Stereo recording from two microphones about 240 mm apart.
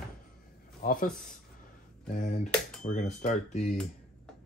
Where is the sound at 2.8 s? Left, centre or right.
Left.